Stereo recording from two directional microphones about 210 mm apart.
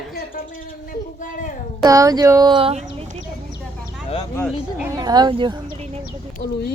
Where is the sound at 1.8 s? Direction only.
15° right (ahead or behind).